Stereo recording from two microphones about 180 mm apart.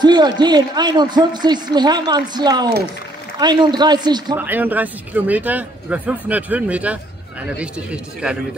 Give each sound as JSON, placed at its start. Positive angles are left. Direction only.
{"t": 0.0, "sound": "a man's voice", "side_deg": -25}
{"t": 4.4, "sound": "a man's voice", "side_deg": -10}